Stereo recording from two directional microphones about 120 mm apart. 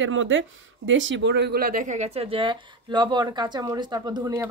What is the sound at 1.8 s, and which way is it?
Speech, 80° right.